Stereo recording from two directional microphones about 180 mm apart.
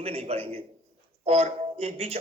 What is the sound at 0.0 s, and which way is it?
Speech, 35° right (ahead or behind).